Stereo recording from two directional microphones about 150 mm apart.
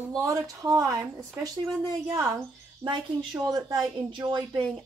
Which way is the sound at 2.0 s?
20° right (ahead or behind).